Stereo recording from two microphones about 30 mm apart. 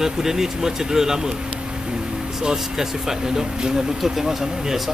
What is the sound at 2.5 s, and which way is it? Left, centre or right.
Speech, centre.